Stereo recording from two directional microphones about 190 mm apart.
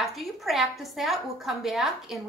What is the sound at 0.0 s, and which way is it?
A woman's voice, centre (ahead or behind).